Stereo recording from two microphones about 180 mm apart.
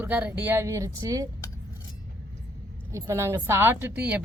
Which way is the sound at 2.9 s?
15° right (ahead or behind).